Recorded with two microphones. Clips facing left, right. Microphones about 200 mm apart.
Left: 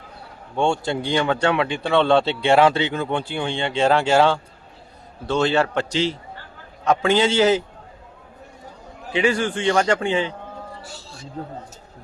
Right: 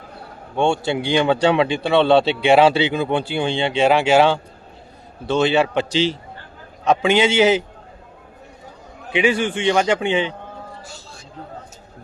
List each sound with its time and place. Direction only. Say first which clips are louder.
0.5 s a man's voice: right 2 dB; 20° right (ahead or behind)
3.4 s a man's voice: right 2 dB; 25° right (ahead or behind)
9.1 s a man's voice: right 2 dB; 20° right (ahead or behind)